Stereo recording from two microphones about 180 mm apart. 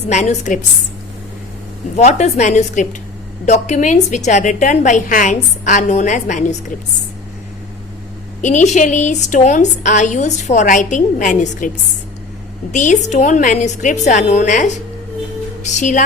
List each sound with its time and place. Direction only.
0.1 s a woman's voice: 40° left (ahead or behind)
2.0 s a woman's voice: 40° left (ahead or behind)
8.4 s a woman's voice: 45° left (ahead or behind)
12.7 s a woman's voice: 45° left (ahead or behind)